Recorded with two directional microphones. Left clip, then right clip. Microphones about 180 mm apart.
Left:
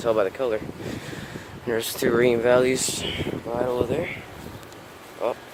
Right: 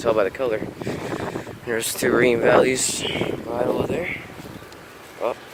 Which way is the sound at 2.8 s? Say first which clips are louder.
Right 3 dB; 15° left (ahead or behind).